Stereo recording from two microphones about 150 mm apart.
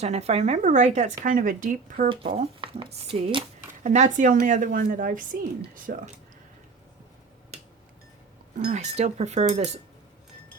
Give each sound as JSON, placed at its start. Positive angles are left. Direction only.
{"t": 0.0, "sound": "speech", "side_deg": -45}
{"t": 2.0, "sound": "speech", "side_deg": -35}
{"t": 3.8, "sound": "a woman's voice", "side_deg": -55}
{"t": 8.5, "sound": "speech", "side_deg": -55}